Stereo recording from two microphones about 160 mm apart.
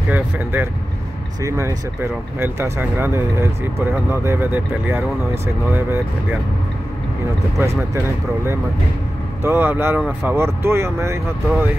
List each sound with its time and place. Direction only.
0.1 s speech: 10° right (ahead or behind)
7.5 s speech: 15° right (ahead or behind)
9.4 s speech: 10° right (ahead or behind)